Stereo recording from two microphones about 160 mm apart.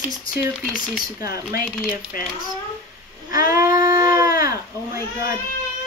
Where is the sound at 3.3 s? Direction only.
60° left (ahead or behind).